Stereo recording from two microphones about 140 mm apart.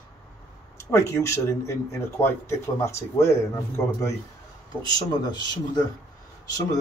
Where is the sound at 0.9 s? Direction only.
20° left (ahead or behind).